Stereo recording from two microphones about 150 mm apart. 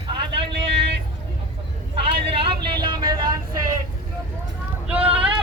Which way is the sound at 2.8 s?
30° right (ahead or behind).